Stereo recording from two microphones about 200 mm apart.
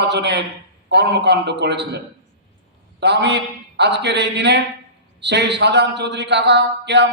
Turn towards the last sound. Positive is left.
turn(degrees=-60)  # may be behind; listen again after turning